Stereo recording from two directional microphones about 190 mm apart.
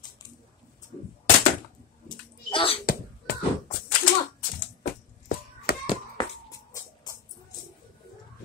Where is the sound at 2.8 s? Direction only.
50° left (ahead or behind).